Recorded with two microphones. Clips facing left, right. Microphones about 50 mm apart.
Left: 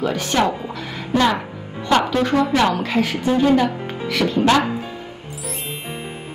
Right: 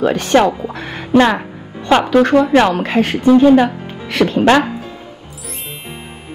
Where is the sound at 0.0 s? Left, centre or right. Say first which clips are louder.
Right 7 dB; right.